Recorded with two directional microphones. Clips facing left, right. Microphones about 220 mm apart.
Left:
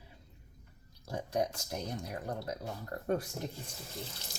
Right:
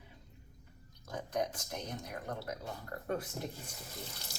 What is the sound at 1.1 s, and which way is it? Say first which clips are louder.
Speech: left 3 dB; 30° left (ahead or behind).